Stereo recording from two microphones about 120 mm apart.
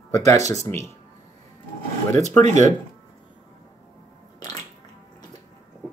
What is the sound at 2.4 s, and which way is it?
Speech, 80° right.